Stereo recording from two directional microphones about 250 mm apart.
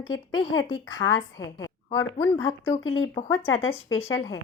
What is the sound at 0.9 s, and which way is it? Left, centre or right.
A woman's voice, centre.